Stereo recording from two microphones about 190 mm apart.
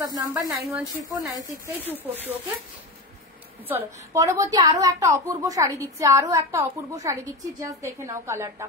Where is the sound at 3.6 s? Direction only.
15° right (ahead or behind).